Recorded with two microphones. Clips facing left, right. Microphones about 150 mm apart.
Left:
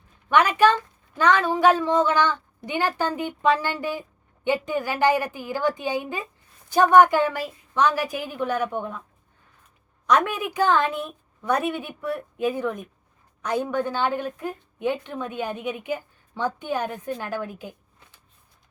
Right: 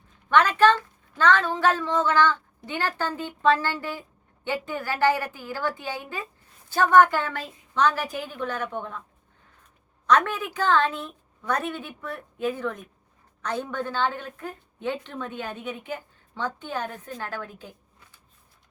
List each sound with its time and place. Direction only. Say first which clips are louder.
0.3 s a woman's voice: left 1 dB; 10° left (ahead or behind)
10.1 s a woman's voice: left 1 dB; 10° left (ahead or behind)